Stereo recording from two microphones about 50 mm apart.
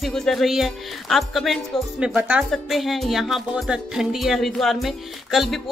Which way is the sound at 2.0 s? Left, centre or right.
Right.